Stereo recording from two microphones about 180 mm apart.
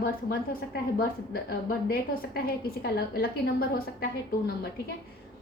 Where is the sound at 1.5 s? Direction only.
60° left (ahead or behind).